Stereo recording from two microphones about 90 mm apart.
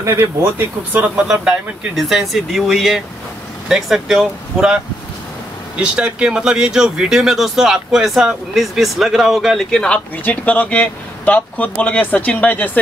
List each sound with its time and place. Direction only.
0.0 s speech: 30° right (ahead or behind)
0.9 s speech: 15° right (ahead or behind)
5.8 s speech: 10° right (ahead or behind); by 12.7 s 15° left (ahead or behind)